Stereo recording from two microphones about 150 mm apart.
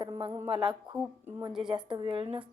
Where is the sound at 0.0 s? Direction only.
30° right (ahead or behind).